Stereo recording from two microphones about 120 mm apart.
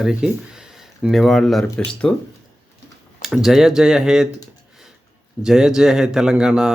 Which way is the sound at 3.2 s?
Centre (ahead or behind).